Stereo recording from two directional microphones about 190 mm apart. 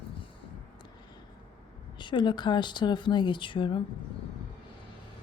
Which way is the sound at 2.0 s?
25° left (ahead or behind).